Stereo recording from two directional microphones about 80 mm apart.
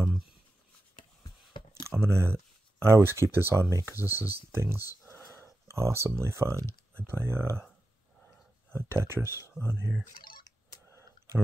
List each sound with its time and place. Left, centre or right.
1.7 s speech: right
8.7 s speech: right
10.9 s clicking: right